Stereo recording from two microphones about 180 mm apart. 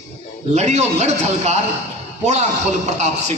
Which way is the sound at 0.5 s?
40° right (ahead or behind).